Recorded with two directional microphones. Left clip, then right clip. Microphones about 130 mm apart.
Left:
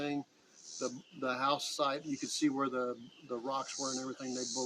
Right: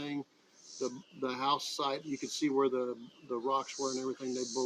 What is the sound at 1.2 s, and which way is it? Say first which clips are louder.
Speech: right 1 dB; 30° left (ahead or behind).